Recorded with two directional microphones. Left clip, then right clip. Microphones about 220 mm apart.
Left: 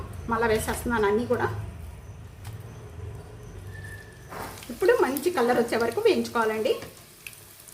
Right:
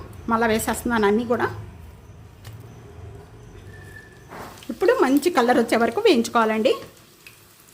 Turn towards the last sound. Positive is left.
turn(degrees=-50)  # may be behind; listen again after turning